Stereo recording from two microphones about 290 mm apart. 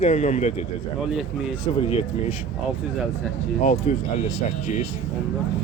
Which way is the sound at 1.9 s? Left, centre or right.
Left.